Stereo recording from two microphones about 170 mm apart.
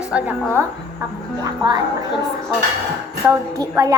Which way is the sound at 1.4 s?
25° right (ahead or behind).